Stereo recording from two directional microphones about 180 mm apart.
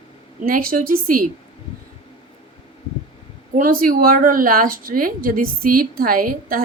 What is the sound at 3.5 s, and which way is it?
Speech, 50° right (ahead or behind).